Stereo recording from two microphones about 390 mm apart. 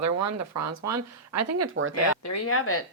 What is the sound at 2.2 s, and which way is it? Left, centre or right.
Speech, left.